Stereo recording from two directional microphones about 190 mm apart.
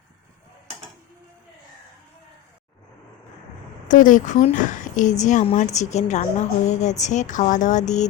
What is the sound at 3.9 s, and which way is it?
A woman's voice, 45° left (ahead or behind).